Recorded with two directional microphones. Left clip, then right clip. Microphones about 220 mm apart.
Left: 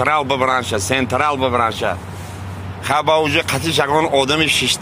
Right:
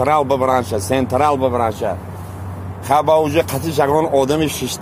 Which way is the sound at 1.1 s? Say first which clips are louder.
Right 3 dB; 30° left (ahead or behind).